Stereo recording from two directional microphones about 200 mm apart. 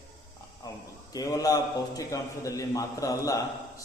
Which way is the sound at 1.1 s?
15° left (ahead or behind).